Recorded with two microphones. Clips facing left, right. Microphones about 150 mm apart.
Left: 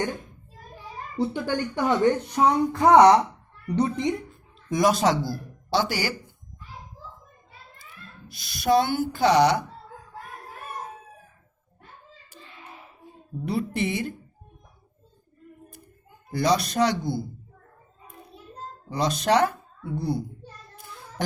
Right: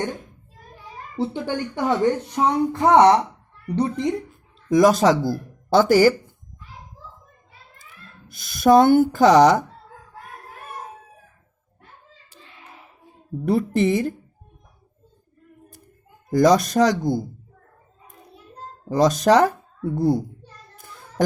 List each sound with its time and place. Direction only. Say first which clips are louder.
1.1 s speech: right 1 dB; 25° right (ahead or behind)
4.7 s speech: right 6 dB; 45° right (ahead or behind)
8.3 s speech: right 7 dB; 50° right (ahead or behind)
13.5 s speech: right 8 dB; 45° right (ahead or behind)
16.3 s speech: right 7 dB; 45° right (ahead or behind)
18.9 s speech: right 7 dB; 45° right (ahead or behind)
20.7 s child singing: right 9 dB; 45° right (ahead or behind)